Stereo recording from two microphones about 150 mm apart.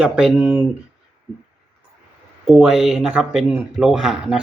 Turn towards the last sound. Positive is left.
turn(degrees=-5)  # may be behind; listen again after turning